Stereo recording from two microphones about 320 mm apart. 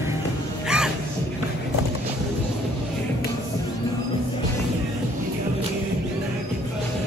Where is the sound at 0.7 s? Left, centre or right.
Centre.